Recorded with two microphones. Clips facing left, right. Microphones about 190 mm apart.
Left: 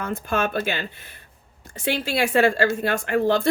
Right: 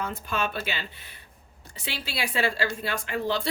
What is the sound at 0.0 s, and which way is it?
Speech, 50° left (ahead or behind).